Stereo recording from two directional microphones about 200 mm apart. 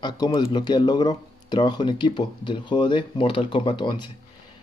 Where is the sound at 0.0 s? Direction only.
20° left (ahead or behind).